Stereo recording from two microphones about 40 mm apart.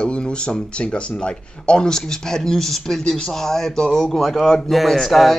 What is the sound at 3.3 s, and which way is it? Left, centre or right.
Speech, centre.